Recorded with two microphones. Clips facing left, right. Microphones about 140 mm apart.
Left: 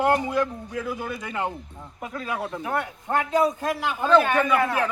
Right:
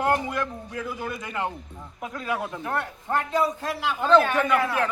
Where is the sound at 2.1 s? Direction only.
Centre (ahead or behind); by 3.7 s 15° left (ahead or behind).